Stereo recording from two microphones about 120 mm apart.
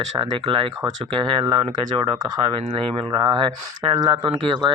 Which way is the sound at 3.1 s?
40° right (ahead or behind).